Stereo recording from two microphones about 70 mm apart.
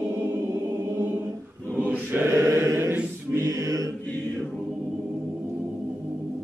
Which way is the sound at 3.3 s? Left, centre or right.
Right.